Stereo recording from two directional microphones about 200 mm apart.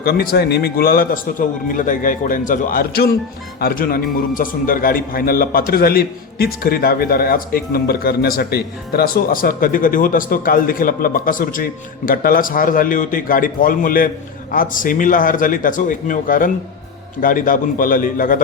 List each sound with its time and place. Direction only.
0.0 s a man's voice: 50° left (ahead or behind)